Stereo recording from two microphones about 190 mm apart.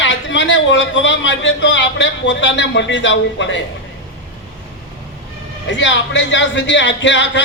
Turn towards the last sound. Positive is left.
turn(degrees=70)  # may be behind; listen again after turning